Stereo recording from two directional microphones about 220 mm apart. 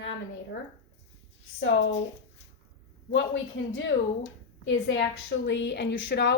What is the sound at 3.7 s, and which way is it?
A woman's voice, 60° left (ahead or behind).